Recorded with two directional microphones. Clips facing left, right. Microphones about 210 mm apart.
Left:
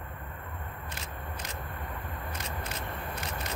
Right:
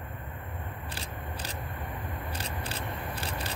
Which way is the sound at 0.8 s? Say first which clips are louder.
Right 2 dB; 30° right (ahead or behind).